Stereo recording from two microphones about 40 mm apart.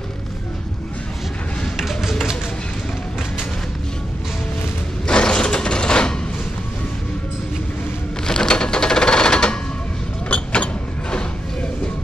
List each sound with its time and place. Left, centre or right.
1.8 s music: centre
5.0 s mechanisms: left
8.3 s sewing machine: centre
10.2 s mechanisms: left